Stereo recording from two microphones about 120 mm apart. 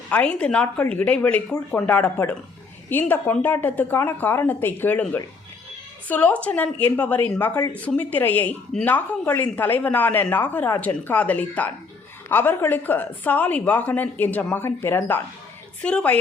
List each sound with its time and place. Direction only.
0.1 s speech: 10° left (ahead or behind)